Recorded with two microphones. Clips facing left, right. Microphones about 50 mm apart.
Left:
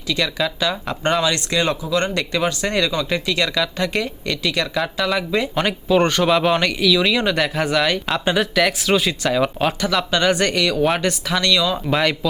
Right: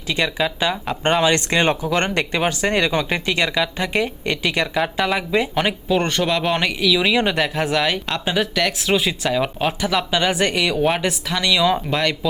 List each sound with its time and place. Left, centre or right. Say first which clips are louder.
0.1 s speech: right 1 dB; right
1.2 s speech: right 2 dB; right
5.1 s speech: right 1 dB; centre
6.1 s speech: left 3 dB; centre
6.6 s speech: left 1 dB; centre
7.1 s speech: right 1 dB; centre
7.3 s speech: left 1 dB; centre
11.5 s speech: right 4 dB; right
11.9 s speech: left 2 dB; centre